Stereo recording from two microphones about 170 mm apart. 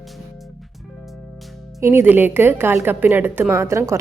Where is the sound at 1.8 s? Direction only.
15° right (ahead or behind).